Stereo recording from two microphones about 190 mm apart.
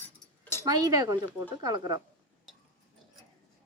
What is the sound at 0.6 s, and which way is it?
Speech, 20° right (ahead or behind).